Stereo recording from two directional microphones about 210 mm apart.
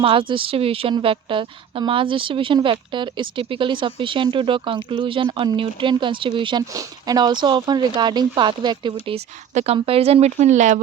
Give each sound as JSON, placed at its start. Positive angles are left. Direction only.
{"t": 0.0, "sound": "a woman's voice", "side_deg": -25}